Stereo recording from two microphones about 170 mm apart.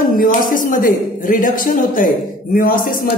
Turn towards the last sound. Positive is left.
turn(degrees=55)  # may be behind; listen again after turning